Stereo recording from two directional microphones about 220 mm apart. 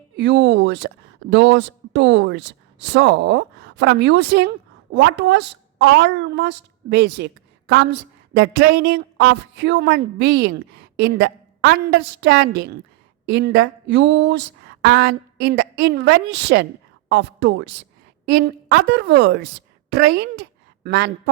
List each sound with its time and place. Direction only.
0.2 s a woman's voice: 55° right (ahead or behind)